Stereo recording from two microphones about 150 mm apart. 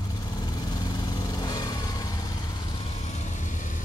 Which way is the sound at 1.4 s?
25° left (ahead or behind).